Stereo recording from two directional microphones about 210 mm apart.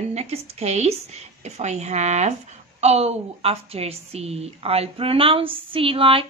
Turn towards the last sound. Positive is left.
turn(degrees=-25)  # may be behind; listen again after turning